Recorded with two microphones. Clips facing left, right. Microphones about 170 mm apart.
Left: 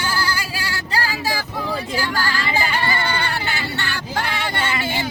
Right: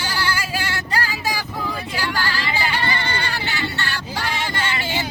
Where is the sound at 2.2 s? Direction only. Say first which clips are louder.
Left 1 dB; 45° left (ahead or behind).